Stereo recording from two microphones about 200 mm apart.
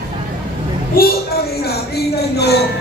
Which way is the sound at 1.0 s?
45° left (ahead or behind).